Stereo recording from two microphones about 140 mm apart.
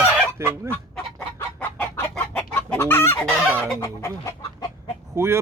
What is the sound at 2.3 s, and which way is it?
Chicken, 10° left (ahead or behind).